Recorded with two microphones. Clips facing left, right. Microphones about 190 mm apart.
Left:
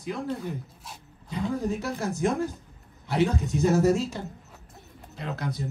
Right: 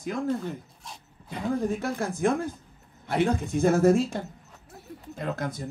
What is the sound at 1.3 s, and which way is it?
Speech, 55° right (ahead or behind).